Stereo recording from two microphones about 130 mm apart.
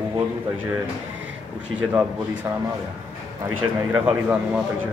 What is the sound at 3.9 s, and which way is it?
Speech, 10° right (ahead or behind).